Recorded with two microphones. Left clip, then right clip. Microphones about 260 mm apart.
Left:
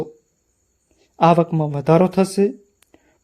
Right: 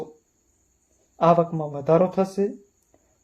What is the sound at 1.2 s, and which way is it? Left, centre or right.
Speech, left.